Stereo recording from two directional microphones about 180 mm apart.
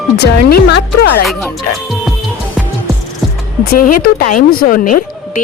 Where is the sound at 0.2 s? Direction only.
70° left (ahead or behind).